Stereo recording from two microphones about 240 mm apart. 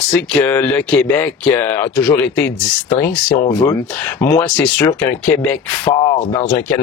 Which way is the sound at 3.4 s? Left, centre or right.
Centre.